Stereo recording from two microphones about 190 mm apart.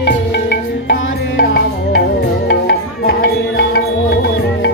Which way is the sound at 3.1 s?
55° left (ahead or behind).